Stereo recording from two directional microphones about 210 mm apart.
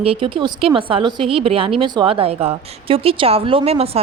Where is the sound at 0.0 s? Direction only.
25° right (ahead or behind).